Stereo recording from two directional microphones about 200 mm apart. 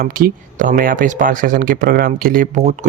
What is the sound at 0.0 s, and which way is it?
Speech, 45° right (ahead or behind).